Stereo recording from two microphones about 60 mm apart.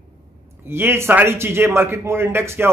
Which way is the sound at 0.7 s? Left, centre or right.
Right.